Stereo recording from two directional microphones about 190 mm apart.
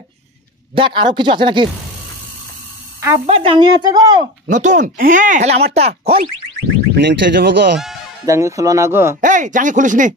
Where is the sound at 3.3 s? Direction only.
30° right (ahead or behind).